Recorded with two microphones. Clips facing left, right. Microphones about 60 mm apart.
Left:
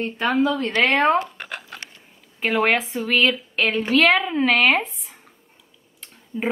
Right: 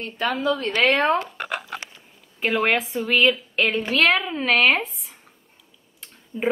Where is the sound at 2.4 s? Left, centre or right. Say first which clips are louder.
Left 1 dB; centre.